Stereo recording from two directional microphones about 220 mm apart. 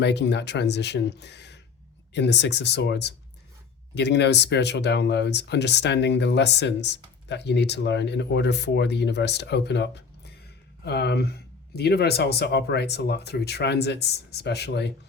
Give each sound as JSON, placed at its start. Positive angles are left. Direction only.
{"t": 0.0, "sound": "speech", "side_deg": 50}